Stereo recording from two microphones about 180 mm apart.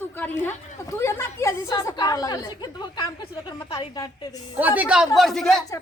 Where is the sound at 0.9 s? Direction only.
15° left (ahead or behind).